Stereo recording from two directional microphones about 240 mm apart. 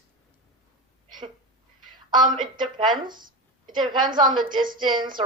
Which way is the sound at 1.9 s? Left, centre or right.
Centre.